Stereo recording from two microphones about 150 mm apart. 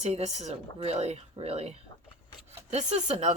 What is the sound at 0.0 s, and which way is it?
Speech, 50° right (ahead or behind).